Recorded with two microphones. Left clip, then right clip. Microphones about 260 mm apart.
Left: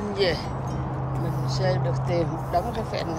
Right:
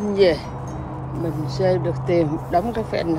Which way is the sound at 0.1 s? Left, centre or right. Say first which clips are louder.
Right 8 dB; right.